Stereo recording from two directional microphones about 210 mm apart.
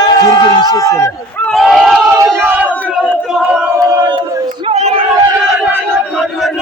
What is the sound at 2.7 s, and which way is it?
Crowd, 5° left (ahead or behind).